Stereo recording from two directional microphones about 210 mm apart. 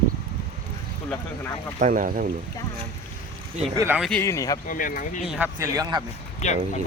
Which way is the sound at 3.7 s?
10° right (ahead or behind).